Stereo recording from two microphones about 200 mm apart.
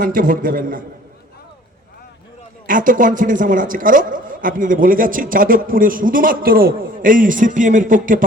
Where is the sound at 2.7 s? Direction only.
40° right (ahead or behind).